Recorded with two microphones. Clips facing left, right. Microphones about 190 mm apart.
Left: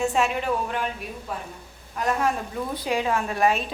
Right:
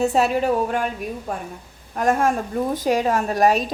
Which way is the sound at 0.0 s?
40° right (ahead or behind).